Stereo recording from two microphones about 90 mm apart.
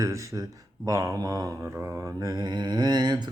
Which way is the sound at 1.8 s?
30° right (ahead or behind).